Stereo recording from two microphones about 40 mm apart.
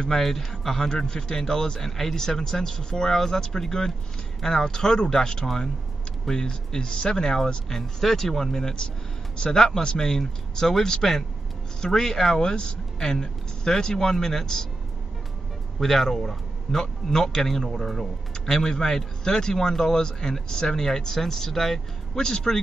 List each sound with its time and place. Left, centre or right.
0.2 s speech: centre
15.8 s speech: centre